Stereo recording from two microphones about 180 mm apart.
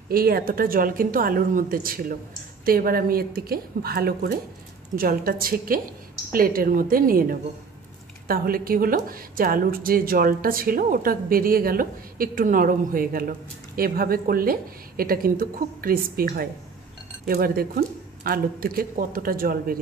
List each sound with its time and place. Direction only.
0.1 s speech: 55° right (ahead or behind)